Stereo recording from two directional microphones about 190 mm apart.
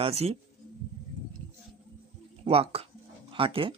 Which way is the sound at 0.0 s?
35° right (ahead or behind).